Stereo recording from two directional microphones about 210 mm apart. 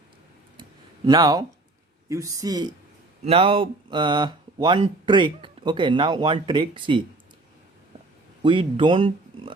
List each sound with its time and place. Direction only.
1.0 s speech: 20° right (ahead or behind)
8.4 s speech: 25° right (ahead or behind)